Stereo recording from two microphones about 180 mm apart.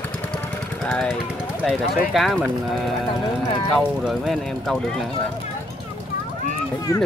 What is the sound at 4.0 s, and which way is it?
Speech, centre (ahead or behind).